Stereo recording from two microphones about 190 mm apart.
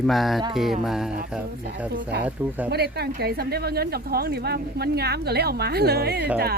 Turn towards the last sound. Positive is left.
turn(degrees=-60)  # may be behind; listen again after turning